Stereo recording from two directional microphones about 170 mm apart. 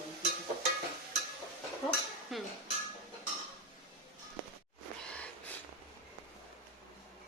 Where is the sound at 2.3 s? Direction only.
Centre (ahead or behind).